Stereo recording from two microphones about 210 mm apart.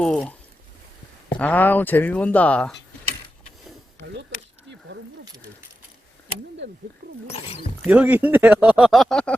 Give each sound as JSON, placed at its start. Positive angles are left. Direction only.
{"t": 0.0, "sound": "speech", "side_deg": 5}
{"t": 1.4, "sound": "speech", "side_deg": 5}
{"t": 7.0, "sound": "speech", "side_deg": -45}
{"t": 7.9, "sound": "speech", "side_deg": -10}